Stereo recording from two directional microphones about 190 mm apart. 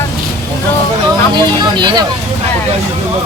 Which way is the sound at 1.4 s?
20° right (ahead or behind).